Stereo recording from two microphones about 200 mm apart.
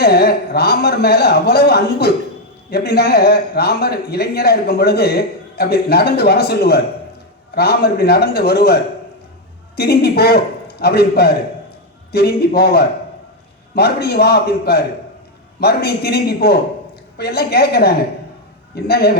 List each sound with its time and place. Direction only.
0.0 s a man's voice: 50° left (ahead or behind)